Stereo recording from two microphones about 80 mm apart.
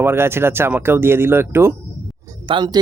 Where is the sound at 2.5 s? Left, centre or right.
Right.